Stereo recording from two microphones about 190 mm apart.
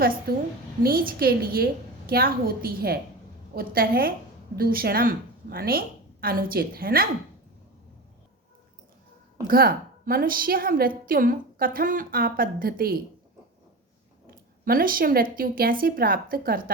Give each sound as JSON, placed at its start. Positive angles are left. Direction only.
{"t": 0.0, "sound": "a woman's voice", "side_deg": -50}
{"t": 9.5, "sound": "a woman's voice", "side_deg": -50}
{"t": 14.3, "sound": "a woman's voice", "side_deg": -50}